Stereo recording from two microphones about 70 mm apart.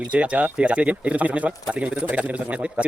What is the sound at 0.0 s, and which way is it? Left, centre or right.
A man's voice, centre.